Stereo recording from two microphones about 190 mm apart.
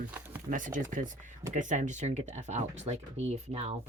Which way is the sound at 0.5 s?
45° right (ahead or behind).